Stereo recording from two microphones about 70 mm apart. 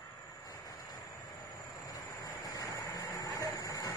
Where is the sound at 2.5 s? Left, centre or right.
Left.